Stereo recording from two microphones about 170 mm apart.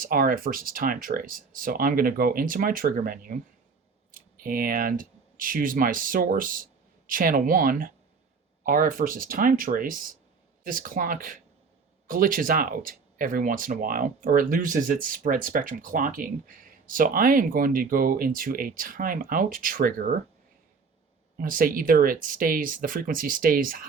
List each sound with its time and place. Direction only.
0.0 s speech: 55° right (ahead or behind)
21.3 s speech: 55° right (ahead or behind)